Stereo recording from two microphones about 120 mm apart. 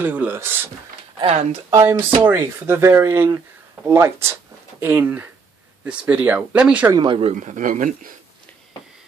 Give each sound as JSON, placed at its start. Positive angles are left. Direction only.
{"t": 0.0, "sound": "speech", "side_deg": -15}
{"t": 1.2, "sound": "speech", "side_deg": -55}
{"t": 1.7, "sound": "speech", "side_deg": -20}
{"t": 7.0, "sound": "speech", "side_deg": -40}
{"t": 7.2, "sound": "speech", "side_deg": -85}